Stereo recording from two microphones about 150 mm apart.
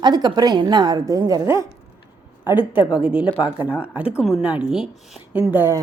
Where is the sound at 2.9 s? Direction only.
5° right (ahead or behind).